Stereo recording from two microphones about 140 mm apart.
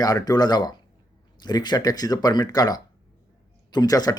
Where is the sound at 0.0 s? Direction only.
30° left (ahead or behind).